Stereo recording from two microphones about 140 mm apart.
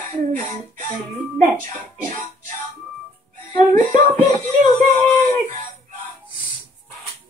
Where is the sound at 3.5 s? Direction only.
65° right (ahead or behind).